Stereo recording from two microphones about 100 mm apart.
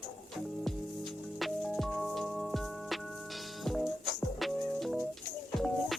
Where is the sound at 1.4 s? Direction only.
Centre (ahead or behind).